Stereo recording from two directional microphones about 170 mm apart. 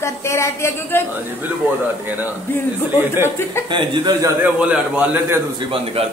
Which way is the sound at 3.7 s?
25° right (ahead or behind).